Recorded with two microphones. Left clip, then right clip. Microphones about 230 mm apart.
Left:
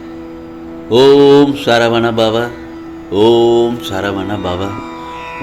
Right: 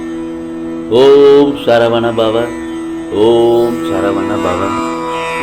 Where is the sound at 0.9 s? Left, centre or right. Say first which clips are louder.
Right 1 dB; left.